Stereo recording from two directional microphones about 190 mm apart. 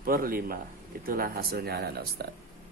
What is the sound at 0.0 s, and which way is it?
Speech, 50° right (ahead or behind).